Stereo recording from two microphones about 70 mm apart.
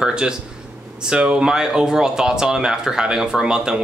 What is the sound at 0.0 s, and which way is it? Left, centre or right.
Speech, centre.